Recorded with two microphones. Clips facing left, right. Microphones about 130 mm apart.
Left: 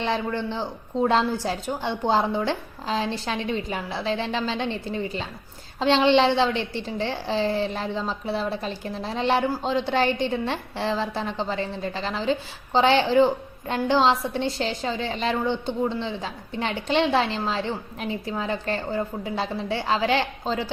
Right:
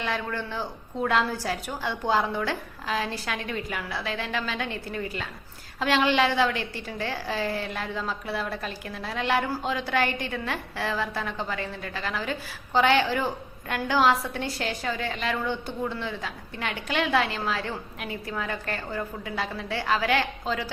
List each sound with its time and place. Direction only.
0.0 s a woman's voice: 25° left (ahead or behind)